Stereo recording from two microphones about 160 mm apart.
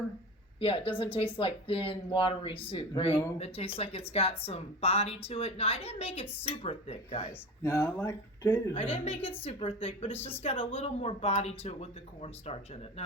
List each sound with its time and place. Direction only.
0.6 s speech: 35° left (ahead or behind)
7.6 s speech: 15° left (ahead or behind)
8.7 s speech: 35° left (ahead or behind)
10.2 s speech: 15° left (ahead or behind)
10.4 s speech: 35° left (ahead or behind)